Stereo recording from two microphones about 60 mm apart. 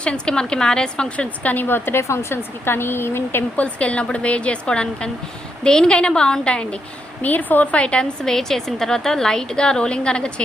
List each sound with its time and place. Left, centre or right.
0.0 s a woman's voice: centre
1.6 s speech: left
3.6 s a woman's voice: left
7.2 s a woman's voice: left
8.2 s a woman's voice: centre